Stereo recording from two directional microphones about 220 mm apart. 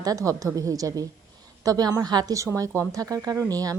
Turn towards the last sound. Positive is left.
turn(degrees=-15)  # may be behind; listen again after turning